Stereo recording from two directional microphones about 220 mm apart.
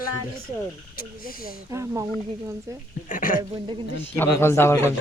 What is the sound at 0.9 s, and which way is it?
Speech, 40° left (ahead or behind).